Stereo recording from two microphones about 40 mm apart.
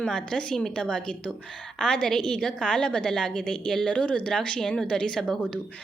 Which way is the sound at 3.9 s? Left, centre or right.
Left.